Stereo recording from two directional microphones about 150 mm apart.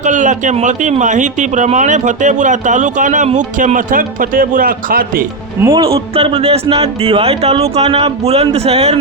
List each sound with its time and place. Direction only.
0.0 s speech: 55° right (ahead or behind); by 5.2 s 70° right (ahead or behind)
5.7 s speech: 40° right (ahead or behind)